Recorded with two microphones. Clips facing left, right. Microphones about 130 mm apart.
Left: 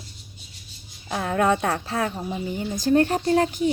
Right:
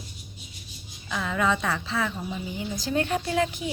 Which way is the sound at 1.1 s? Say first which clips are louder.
Left 4 dB; 55° left (ahead or behind).